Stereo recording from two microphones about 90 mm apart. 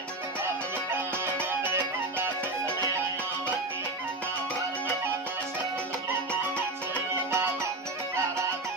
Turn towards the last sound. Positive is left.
turn(degrees=-30)  # may be behind; listen again after turning